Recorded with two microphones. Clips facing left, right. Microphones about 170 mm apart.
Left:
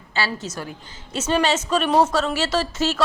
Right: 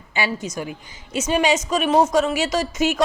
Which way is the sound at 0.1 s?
15° right (ahead or behind).